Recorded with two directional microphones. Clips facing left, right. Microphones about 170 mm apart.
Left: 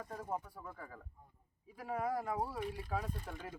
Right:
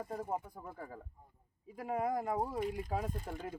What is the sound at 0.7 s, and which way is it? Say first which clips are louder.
Speech: right 5 dB; 30° right (ahead or behind).